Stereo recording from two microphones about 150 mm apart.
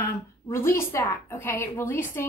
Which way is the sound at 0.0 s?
20° left (ahead or behind).